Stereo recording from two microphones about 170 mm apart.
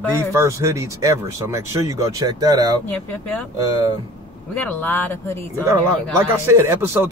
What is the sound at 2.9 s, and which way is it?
Speech, 10° left (ahead or behind).